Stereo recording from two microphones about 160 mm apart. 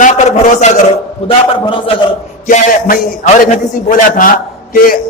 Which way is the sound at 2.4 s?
55° left (ahead or behind).